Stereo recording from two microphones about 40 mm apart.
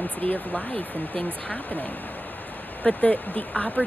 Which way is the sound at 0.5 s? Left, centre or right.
Left.